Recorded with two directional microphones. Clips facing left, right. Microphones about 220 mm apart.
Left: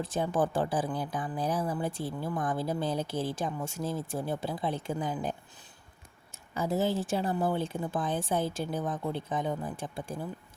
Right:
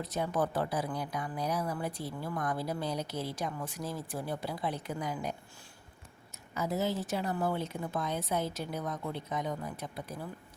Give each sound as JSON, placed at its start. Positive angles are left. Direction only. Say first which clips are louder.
{"t": 0.0, "sound": "speech", "louder": "left 3 dB", "side_deg": 30}
{"t": 6.5, "sound": "speech", "louder": "left 3 dB", "side_deg": 30}